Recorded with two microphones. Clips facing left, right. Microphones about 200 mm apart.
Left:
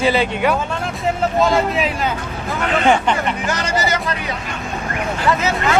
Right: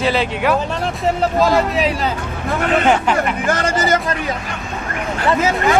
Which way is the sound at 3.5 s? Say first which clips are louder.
Right 4 dB; 50° right (ahead or behind).